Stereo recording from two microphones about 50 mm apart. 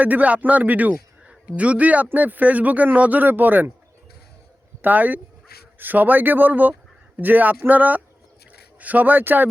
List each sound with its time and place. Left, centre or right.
0.0 s speech: right
4.8 s speech: right